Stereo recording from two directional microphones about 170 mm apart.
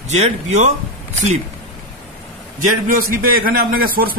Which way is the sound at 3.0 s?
55° right (ahead or behind).